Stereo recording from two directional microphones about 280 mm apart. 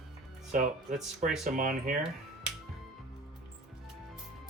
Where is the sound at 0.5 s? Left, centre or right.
Right.